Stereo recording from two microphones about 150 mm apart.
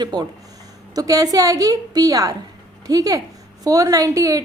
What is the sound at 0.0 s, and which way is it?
A woman's voice, 25° right (ahead or behind).